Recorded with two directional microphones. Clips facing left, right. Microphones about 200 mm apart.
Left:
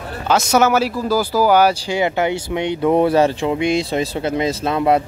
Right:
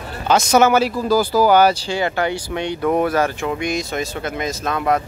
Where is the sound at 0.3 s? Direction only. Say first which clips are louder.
Right 1 dB; 5° left (ahead or behind).